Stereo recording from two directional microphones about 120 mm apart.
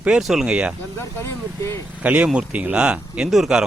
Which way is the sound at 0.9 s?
20° left (ahead or behind).